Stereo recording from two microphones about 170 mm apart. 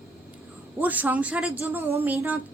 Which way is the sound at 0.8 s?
10° right (ahead or behind).